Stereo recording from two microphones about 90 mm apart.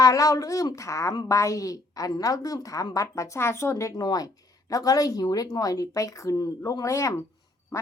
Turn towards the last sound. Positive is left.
turn(degrees=40)  # may be behind; listen again after turning